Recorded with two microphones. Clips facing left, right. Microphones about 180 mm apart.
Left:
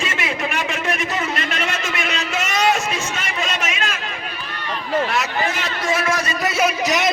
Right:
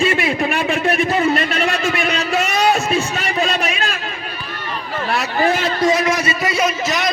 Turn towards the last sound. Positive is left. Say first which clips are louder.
# left 1 dB
turn(degrees=20)  # may be behind; listen again after turning